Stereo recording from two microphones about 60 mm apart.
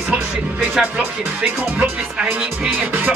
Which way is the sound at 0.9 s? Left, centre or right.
Right.